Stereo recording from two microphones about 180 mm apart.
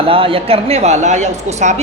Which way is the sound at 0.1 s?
30° right (ahead or behind).